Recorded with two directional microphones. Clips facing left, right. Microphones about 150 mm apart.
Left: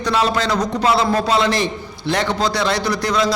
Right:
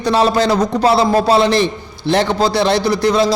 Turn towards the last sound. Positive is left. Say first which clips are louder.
# right 6 dB
turn(degrees=-30)  # may be behind; listen again after turning